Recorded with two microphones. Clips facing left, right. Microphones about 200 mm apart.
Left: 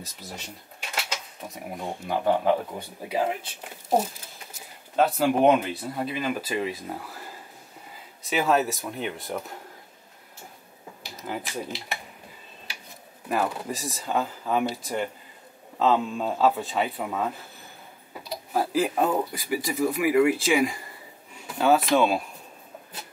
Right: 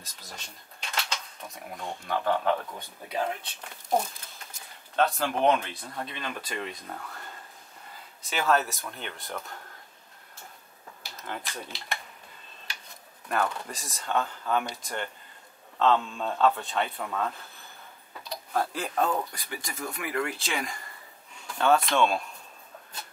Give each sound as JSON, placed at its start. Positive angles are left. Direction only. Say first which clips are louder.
{"t": 0.0, "sound": "cutlery", "louder": "left 6 dB", "side_deg": 5}
{"t": 2.0, "sound": "speech", "louder": "left 4 dB", "side_deg": 10}
{"t": 2.5, "sound": "speech", "louder": "left 5 dB", "side_deg": 25}
{"t": 3.0, "sound": "speech", "louder": "left 4 dB", "side_deg": 10}
{"t": 7.9, "sound": "a sound", "louder": "left 6 dB", "side_deg": 0}
{"t": 8.9, "sound": "speech", "louder": "left 7 dB", "side_deg": 5}
{"t": 11.1, "sound": "speech", "louder": "left 4 dB", "side_deg": 5}
{"t": 13.3, "sound": "speech", "louder": "left 3 dB", "side_deg": 5}
{"t": 18.1, "sound": "tick-tock", "louder": "left 3 dB", "side_deg": 5}
{"t": 18.9, "sound": "speech", "louder": "even", "side_deg": 15}
{"t": 19.3, "sound": "speech", "louder": "left 11 dB", "side_deg": 5}